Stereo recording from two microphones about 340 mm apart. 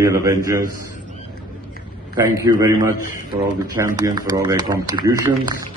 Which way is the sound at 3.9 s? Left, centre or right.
Centre.